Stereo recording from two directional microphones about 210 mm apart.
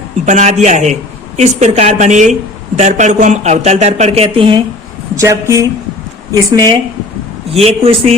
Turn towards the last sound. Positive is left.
turn(degrees=-30)  # may be behind; listen again after turning